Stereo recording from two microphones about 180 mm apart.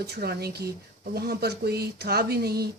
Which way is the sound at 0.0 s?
65° right (ahead or behind).